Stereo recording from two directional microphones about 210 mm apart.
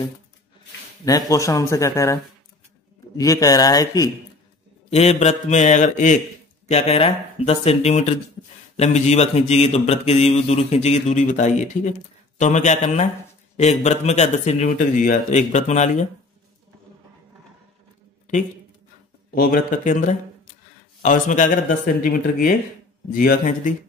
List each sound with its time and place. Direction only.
1.0 s speech: 15° left (ahead or behind)
3.2 s speech: 15° left (ahead or behind)
4.8 s speech: 30° left (ahead or behind)
19.3 s speech: 40° left (ahead or behind)